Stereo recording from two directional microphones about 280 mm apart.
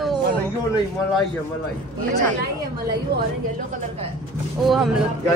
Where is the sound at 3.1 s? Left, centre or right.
Right.